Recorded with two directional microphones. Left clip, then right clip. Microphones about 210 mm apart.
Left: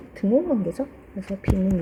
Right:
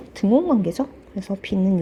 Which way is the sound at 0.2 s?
45° right (ahead or behind).